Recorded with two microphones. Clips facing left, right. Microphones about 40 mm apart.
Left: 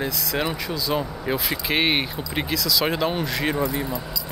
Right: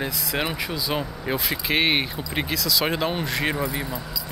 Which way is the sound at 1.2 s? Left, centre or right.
Centre.